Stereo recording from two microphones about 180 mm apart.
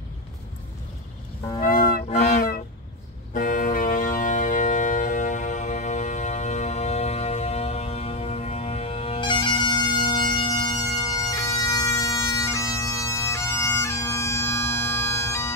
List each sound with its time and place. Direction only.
2.0 s music: 40° left (ahead or behind); by 15.5 s 15° left (ahead or behind)